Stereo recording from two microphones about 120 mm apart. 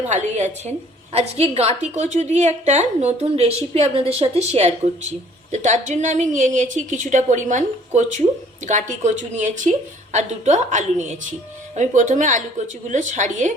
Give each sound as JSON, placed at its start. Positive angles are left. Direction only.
{"t": 0.1, "sound": "a woman's voice", "side_deg": -80}
{"t": 1.1, "sound": "a woman's voice", "side_deg": -60}